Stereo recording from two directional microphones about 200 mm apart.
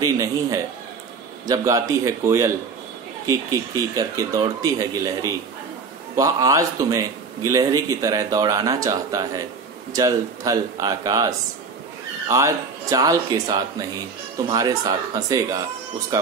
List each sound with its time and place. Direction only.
0.0 s a man's voice: 15° right (ahead or behind)